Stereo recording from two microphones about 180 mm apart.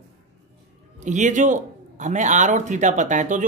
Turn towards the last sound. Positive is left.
turn(degrees=-45)  # may be behind; listen again after turning